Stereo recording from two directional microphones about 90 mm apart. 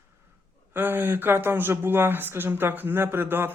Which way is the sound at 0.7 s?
25° right (ahead or behind).